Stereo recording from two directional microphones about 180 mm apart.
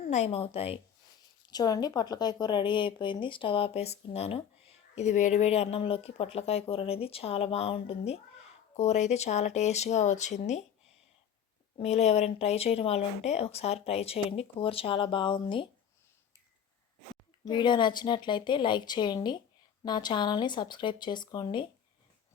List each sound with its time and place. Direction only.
0.0 s a woman's voice: 35° left (ahead or behind)
11.8 s speech: 35° left (ahead or behind)
17.4 s speech: 25° left (ahead or behind)